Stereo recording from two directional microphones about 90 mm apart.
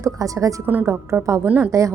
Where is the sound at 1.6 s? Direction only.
35° right (ahead or behind).